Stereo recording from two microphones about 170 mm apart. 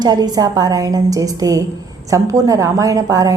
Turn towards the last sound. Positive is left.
turn(degrees=-20)  # may be behind; listen again after turning